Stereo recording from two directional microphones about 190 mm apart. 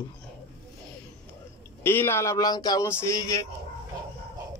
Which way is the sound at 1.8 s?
10° left (ahead or behind).